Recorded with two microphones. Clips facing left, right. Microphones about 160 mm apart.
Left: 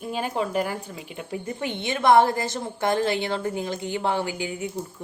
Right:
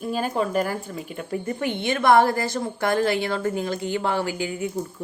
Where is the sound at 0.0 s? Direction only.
15° left (ahead or behind).